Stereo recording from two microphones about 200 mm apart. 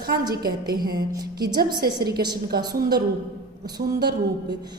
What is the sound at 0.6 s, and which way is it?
A woman's voice, 20° right (ahead or behind).